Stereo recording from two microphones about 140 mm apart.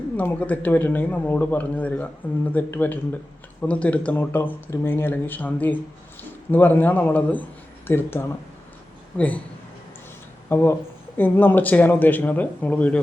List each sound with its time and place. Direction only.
0.2 s speech: 10° left (ahead or behind)
10.5 s speech: 15° left (ahead or behind)